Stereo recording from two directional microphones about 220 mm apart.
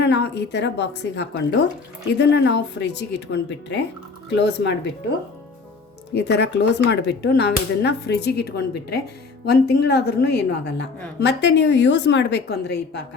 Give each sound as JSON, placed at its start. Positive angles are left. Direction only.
{"t": 0.0, "sound": "a woman's voice", "side_deg": 50}
{"t": 6.2, "sound": "a woman's voice", "side_deg": 50}